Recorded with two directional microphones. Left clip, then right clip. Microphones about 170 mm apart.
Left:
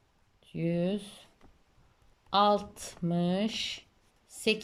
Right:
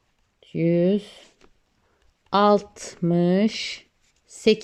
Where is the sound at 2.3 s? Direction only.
45° right (ahead or behind).